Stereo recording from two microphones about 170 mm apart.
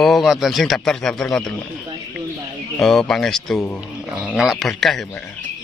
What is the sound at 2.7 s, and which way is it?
Speech, centre (ahead or behind).